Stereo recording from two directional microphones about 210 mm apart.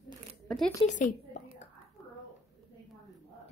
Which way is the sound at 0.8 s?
35° left (ahead or behind).